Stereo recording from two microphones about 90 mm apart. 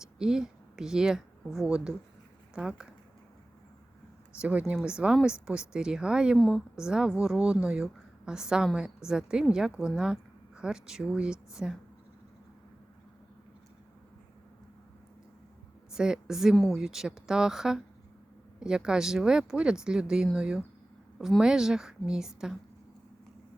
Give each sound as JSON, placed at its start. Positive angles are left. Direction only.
{"t": 0.2, "sound": "a woman's voice", "side_deg": -5}
{"t": 4.4, "sound": "a woman's voice", "side_deg": -15}
{"t": 15.9, "sound": "a woman's voice", "side_deg": -5}